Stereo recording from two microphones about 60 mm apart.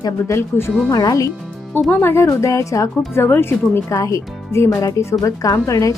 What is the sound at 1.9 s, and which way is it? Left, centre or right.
Speech, left.